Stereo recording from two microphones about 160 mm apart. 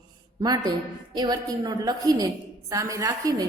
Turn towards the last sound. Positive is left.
turn(degrees=-25)  # may be behind; listen again after turning